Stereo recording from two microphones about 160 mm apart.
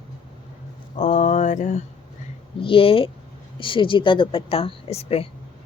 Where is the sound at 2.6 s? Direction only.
35° left (ahead or behind).